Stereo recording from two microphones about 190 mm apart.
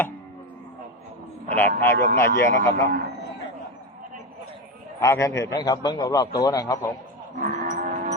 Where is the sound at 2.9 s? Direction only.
55° right (ahead or behind).